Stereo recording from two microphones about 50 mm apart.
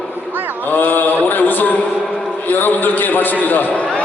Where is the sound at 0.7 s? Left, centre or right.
Left.